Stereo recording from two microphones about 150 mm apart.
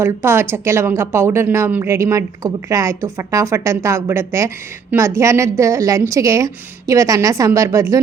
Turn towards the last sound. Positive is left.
turn(degrees=-20)  # may be behind; listen again after turning